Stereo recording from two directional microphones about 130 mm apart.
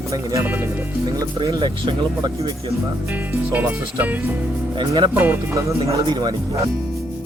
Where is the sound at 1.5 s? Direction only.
40° right (ahead or behind).